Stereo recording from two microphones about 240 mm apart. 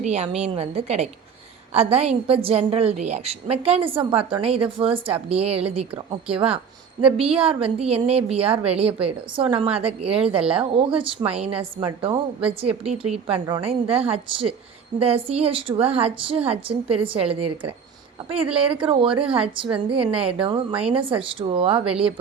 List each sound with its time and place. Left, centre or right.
0.0 s a woman's voice: right
18.5 s a woman's voice: right